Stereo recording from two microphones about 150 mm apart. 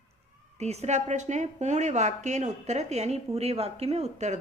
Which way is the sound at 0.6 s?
45° right (ahead or behind).